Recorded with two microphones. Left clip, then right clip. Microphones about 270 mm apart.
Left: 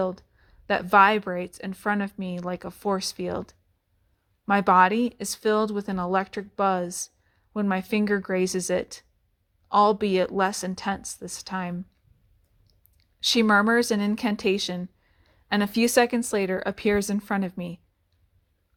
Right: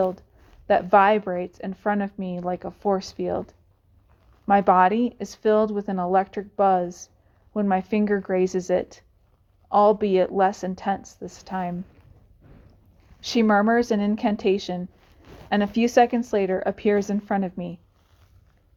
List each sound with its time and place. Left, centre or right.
0.0 s a woman's voice: left
13.1 s a woman's voice: left